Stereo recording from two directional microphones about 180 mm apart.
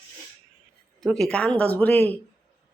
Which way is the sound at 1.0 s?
Centre (ahead or behind).